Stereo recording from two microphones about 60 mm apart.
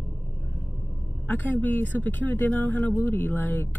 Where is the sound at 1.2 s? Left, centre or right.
Left.